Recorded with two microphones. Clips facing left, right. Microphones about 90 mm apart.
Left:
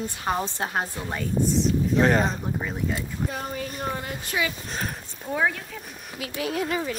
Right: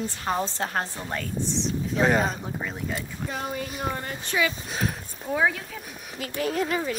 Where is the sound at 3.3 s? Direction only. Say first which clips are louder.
Even; 45° left (ahead or behind).